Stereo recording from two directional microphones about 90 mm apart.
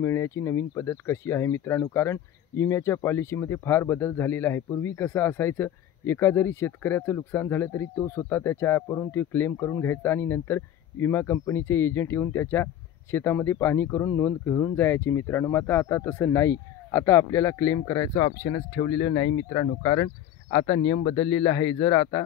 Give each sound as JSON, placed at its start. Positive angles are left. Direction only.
{"t": 0.0, "sound": "speech", "side_deg": 30}
{"t": 21.2, "sound": "speech", "side_deg": 35}